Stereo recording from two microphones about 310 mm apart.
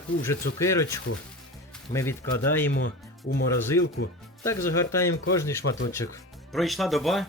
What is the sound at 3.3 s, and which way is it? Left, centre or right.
Speech, left.